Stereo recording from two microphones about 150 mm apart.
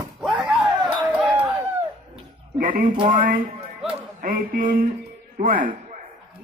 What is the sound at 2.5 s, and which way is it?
Speech, 65° right (ahead or behind).